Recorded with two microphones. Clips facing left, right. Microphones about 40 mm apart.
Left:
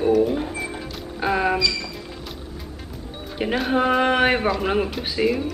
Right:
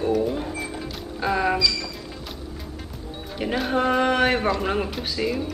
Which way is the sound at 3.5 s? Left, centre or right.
Centre.